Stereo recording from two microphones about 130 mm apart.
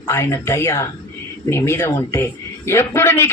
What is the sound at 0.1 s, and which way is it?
A woman's voice, 20° left (ahead or behind).